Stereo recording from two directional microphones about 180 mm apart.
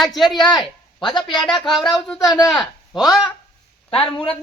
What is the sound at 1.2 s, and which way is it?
Speech, 25° left (ahead or behind).